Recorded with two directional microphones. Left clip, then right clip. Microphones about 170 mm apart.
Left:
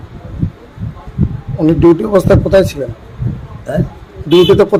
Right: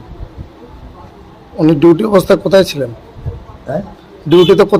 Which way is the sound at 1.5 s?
Centre (ahead or behind).